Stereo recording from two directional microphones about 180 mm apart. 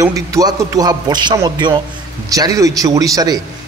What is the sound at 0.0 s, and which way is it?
A man's voice, 20° right (ahead or behind).